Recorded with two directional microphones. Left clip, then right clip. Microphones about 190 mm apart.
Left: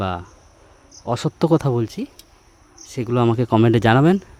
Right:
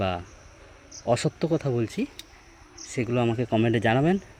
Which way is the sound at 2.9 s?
45° left (ahead or behind).